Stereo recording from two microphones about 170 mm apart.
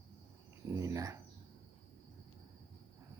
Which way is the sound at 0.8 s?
20° right (ahead or behind).